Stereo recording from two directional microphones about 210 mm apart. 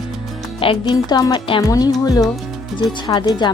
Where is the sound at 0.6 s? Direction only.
20° left (ahead or behind).